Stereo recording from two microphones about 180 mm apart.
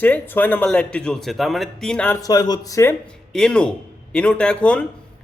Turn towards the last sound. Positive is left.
turn(degrees=5)  # may be behind; listen again after turning